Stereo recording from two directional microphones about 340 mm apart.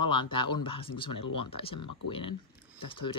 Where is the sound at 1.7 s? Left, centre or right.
Left.